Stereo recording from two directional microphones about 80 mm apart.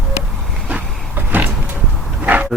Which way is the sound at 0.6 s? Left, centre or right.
Right.